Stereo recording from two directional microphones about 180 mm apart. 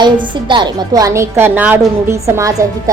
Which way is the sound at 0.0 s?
25° right (ahead or behind).